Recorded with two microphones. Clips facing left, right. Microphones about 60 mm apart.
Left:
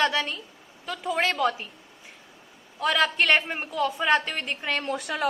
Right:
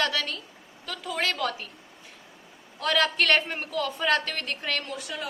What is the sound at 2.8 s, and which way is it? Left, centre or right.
A woman's voice, centre.